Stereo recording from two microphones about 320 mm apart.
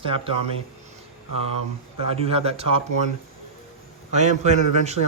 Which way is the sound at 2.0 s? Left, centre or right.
Centre.